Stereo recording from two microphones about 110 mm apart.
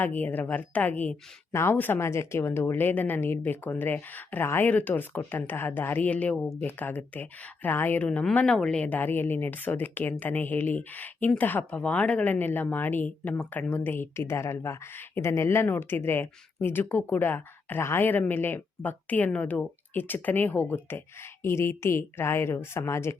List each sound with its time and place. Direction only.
0.0 s speech: 15° left (ahead or behind)